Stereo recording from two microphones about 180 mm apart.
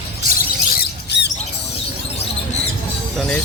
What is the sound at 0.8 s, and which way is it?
Squawk, 65° left (ahead or behind).